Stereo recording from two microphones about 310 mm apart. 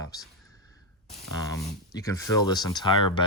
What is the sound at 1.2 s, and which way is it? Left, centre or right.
Speech, centre.